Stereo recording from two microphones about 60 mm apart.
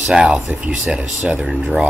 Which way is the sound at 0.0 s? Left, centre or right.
Centre.